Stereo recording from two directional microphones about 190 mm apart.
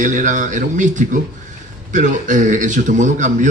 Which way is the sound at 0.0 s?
40° right (ahead or behind).